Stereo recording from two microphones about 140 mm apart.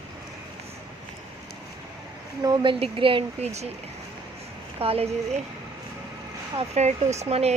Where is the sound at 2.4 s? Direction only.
30° right (ahead or behind).